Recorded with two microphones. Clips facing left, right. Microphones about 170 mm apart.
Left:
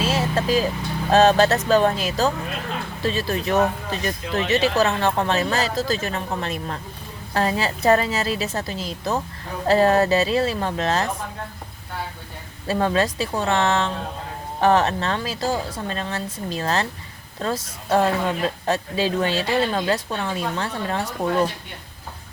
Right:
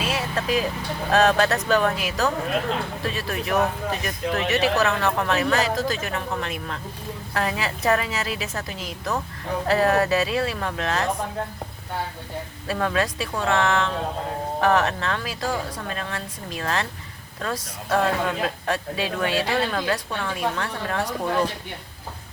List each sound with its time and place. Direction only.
0.0 s vehicle: 30° left (ahead or behind)
1.1 s a woman's voice: 30° left (ahead or behind)
12.6 s speech: 30° left (ahead or behind)